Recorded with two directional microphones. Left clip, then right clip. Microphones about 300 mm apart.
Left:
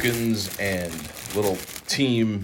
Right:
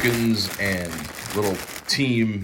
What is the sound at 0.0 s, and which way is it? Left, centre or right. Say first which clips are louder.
Speech: right 3 dB; centre.